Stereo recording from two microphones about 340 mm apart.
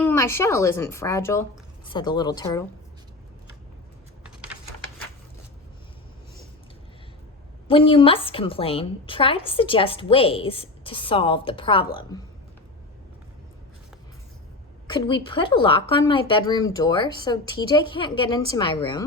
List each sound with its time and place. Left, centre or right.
0.0 s speech: centre
7.7 s speech: centre
14.8 s speech: centre